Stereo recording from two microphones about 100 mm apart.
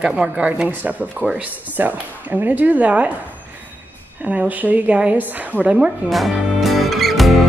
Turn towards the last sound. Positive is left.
turn(degrees=0)  # may be behind; listen again after turning